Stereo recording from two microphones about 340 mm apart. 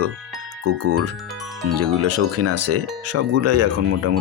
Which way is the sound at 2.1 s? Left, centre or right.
Right.